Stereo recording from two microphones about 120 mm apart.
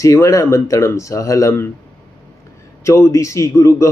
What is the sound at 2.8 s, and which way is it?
Speech, 25° left (ahead or behind).